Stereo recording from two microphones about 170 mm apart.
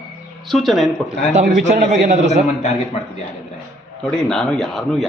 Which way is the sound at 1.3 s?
45° right (ahead or behind).